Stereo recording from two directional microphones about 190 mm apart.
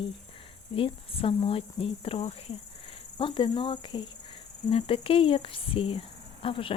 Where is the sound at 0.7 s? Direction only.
30° left (ahead or behind).